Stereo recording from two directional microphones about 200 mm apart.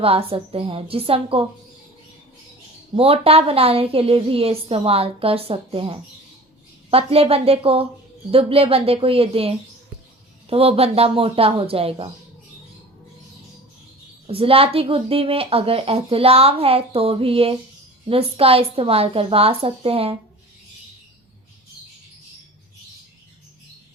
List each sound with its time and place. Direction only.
0.0 s a woman's voice: 30° right (ahead or behind)
2.9 s a woman's voice: 30° right (ahead or behind)
14.3 s a woman's voice: 30° right (ahead or behind)